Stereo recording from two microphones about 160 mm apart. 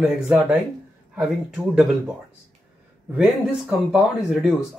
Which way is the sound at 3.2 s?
5° right (ahead or behind).